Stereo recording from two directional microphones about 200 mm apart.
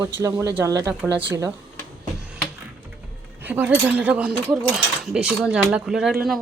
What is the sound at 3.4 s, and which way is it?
Speech, 10° right (ahead or behind).